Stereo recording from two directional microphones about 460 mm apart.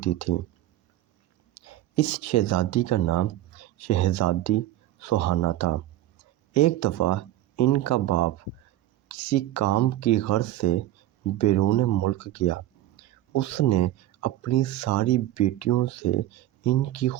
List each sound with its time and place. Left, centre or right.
0.0 s speech: left
1.6 s speech: left